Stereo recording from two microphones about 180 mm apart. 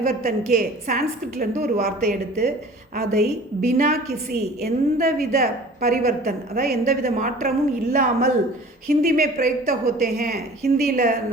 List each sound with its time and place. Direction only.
0.0 s a woman's voice: 55° right (ahead or behind)